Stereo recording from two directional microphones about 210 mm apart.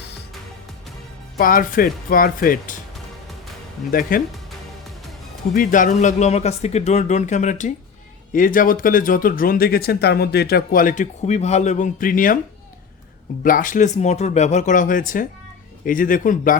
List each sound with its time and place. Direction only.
1.4 s speech: 40° left (ahead or behind)
4.1 s speech: 40° left (ahead or behind)
5.5 s speech: 40° left (ahead or behind)
13.4 s speech: 40° left (ahead or behind)